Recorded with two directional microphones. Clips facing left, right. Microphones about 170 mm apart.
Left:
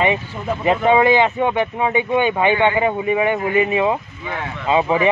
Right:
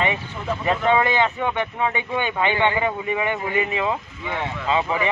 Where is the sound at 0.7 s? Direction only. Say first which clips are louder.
Left 6 dB; 20° left (ahead or behind).